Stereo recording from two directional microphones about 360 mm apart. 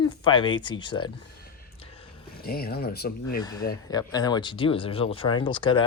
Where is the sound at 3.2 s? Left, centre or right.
Left.